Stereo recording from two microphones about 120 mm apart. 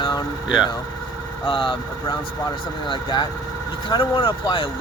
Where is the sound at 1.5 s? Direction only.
45° left (ahead or behind).